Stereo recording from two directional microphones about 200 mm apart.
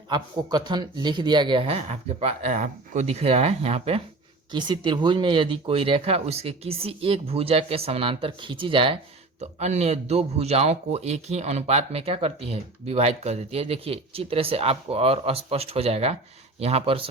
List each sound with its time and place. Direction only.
0.1 s speech: 20° right (ahead or behind)